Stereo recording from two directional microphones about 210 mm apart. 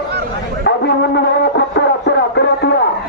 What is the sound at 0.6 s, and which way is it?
Music, 50° left (ahead or behind).